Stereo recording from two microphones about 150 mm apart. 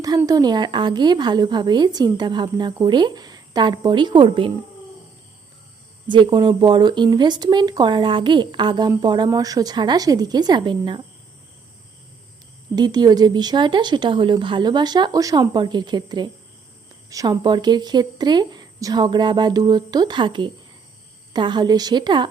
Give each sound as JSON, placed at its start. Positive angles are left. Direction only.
{"t": 0.2, "sound": "a woman's voice", "side_deg": -25}
{"t": 6.1, "sound": "a woman's voice", "side_deg": -30}
{"t": 12.7, "sound": "a woman's voice", "side_deg": -25}